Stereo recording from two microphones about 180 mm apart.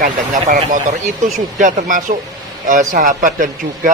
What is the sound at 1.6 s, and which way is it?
Speech, 45° right (ahead or behind).